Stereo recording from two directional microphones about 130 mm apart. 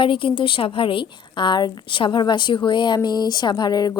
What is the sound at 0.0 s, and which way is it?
Speech, 40° left (ahead or behind).